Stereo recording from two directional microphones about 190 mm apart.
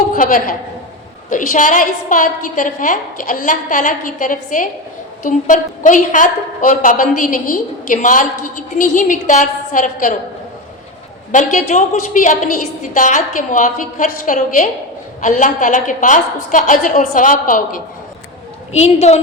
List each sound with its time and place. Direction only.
0.1 s a woman's voice: 45° left (ahead or behind)
11.3 s a woman's voice: 40° left (ahead or behind)
18.7 s a woman's voice: 35° left (ahead or behind)